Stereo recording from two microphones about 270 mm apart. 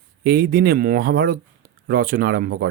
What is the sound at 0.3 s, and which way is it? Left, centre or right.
Speech, right.